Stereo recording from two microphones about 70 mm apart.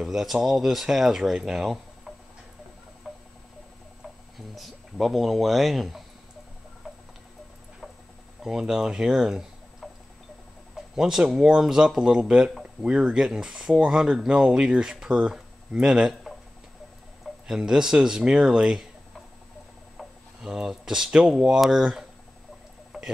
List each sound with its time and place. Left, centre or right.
0.0 s speech: centre
3.1 s a sound: centre
4.6 s speech: centre
8.5 s speech: centre
11.0 s speech: centre
17.5 s speech: centre
20.0 s speech: centre
22.9 s a sound: centre